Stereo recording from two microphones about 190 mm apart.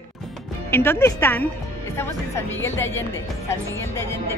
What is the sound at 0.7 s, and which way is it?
Speech, 15° left (ahead or behind).